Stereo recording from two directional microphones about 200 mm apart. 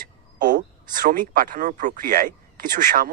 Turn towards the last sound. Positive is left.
turn(degrees=-45)  # may be behind; listen again after turning